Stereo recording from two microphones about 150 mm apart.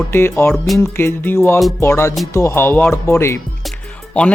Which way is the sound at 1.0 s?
15° left (ahead or behind).